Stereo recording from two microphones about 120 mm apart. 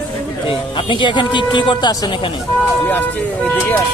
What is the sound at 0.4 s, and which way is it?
Speech, 45° left (ahead or behind).